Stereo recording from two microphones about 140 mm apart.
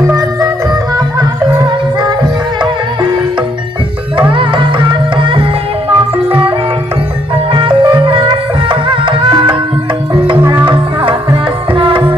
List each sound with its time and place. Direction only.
0.0 s music: 25° right (ahead or behind)
1.6 s music: 30° right (ahead or behind)
4.3 s music: 35° right (ahead or behind)
7.5 s music: 35° right (ahead or behind)
9.3 s tabla: 25° right (ahead or behind)
10.3 s music: 10° right (ahead or behind)
11.7 s music: 35° right (ahead or behind)